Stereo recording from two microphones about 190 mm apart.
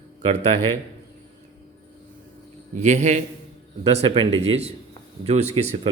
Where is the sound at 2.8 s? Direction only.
40° right (ahead or behind).